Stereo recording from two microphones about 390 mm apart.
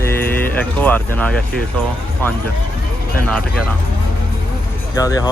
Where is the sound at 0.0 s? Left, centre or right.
Centre.